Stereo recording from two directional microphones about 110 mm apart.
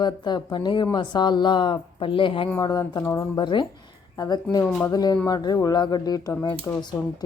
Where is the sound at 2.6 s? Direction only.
40° left (ahead or behind).